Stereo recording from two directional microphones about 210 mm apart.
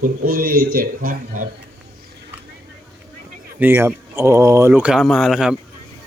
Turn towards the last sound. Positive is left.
turn(degrees=0)  # may be behind; listen again after turning